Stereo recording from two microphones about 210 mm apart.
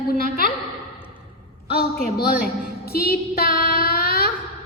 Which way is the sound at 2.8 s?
45° left (ahead or behind).